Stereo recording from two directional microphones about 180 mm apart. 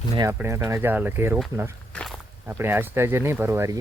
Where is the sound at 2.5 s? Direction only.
10° right (ahead or behind).